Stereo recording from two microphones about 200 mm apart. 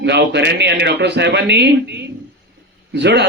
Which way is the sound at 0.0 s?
60° right (ahead or behind).